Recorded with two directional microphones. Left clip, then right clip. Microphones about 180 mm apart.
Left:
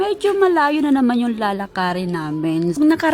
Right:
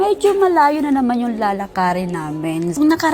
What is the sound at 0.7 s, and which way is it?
A woman's voice, 35° left (ahead or behind).